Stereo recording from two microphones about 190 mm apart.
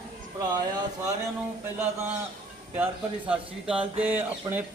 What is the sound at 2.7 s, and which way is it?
Speech, 5° right (ahead or behind).